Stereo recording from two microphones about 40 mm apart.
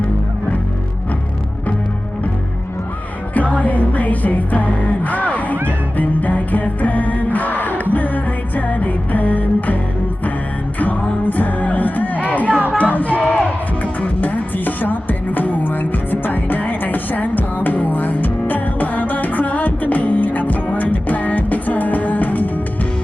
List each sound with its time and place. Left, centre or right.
3.3 s music: left
11.3 s music: left
12.5 s a sound: right
12.7 s music: left